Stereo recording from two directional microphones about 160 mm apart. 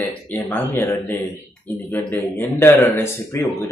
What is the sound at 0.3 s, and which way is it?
Speech, 10° left (ahead or behind).